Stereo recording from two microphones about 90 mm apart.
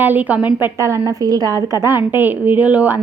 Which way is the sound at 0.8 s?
35° right (ahead or behind).